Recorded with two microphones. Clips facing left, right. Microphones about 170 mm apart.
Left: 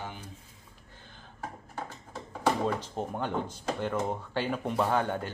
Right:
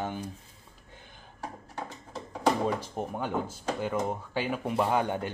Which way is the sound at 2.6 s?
10° right (ahead or behind).